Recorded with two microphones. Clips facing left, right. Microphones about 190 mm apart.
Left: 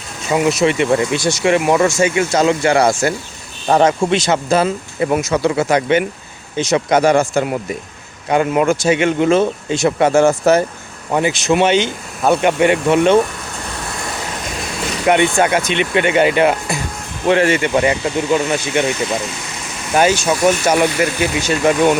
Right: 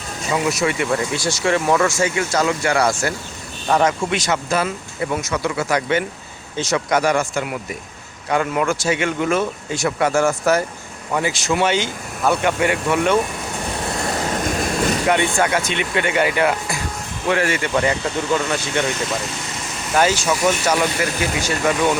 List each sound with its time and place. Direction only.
0.3 s speech: 25° left (ahead or behind)
15.1 s speech: 20° left (ahead or behind)
19.9 s speech: 15° left (ahead or behind)